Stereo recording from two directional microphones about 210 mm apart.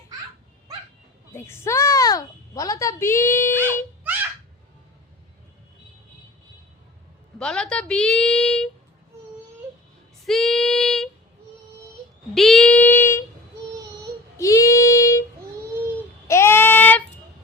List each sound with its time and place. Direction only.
1.3 s a woman's voice: 10° left (ahead or behind)
7.3 s a woman's voice: 5° left (ahead or behind)
10.2 s female singing: centre (ahead or behind)
12.3 s child singing: centre (ahead or behind)
14.3 s child singing: 15° left (ahead or behind)
16.2 s child singing: 10° left (ahead or behind)